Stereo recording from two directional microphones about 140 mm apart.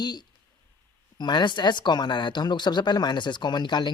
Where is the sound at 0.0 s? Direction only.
30° left (ahead or behind).